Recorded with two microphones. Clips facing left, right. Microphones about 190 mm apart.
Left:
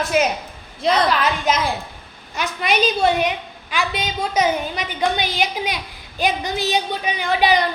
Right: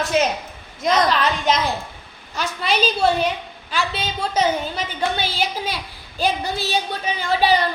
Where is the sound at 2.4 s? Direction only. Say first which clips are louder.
Left 1 dB; 35° right (ahead or behind).